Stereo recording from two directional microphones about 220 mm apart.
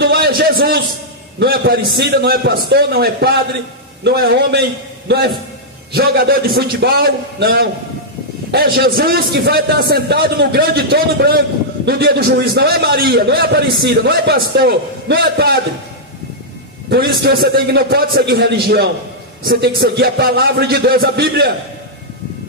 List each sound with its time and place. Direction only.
0.0 s a sound: 45° right (ahead or behind)
1.4 s a man's voice: 45° right (ahead or behind)
16.9 s a man's voice: 45° right (ahead or behind)